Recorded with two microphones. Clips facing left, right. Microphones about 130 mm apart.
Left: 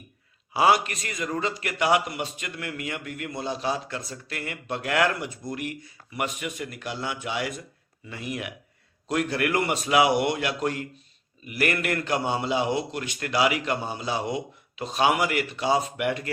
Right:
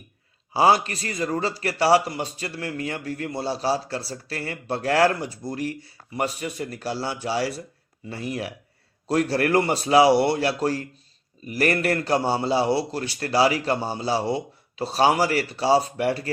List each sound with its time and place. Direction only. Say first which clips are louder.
0.5 s a man's voice: right 2 dB; 30° right (ahead or behind)